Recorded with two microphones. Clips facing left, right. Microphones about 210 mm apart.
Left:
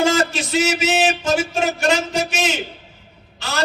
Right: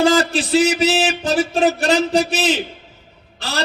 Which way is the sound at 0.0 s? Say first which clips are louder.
Right 3 dB; 35° right (ahead or behind).